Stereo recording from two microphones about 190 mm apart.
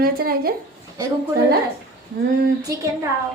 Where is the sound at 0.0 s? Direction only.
50° right (ahead or behind).